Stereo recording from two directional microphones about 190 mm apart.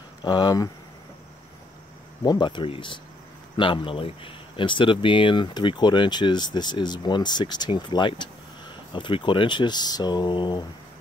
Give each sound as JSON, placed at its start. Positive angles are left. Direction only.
{"t": 0.2, "sound": "speech", "side_deg": 25}
{"t": 2.2, "sound": "speech", "side_deg": 25}